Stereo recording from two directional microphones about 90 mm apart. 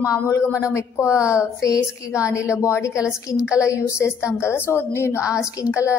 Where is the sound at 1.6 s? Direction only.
40° left (ahead or behind).